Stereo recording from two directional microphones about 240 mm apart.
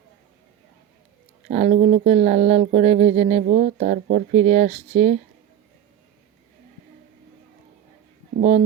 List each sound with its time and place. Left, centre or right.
1.5 s speech: right